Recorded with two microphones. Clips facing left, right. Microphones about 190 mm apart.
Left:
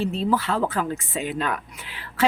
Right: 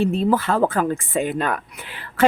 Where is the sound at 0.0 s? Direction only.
50° right (ahead or behind).